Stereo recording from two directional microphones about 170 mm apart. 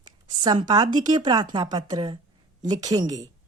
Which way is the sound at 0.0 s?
25° right (ahead or behind).